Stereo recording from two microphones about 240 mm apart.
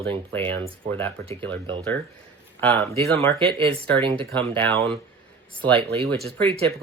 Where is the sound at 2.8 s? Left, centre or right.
Centre.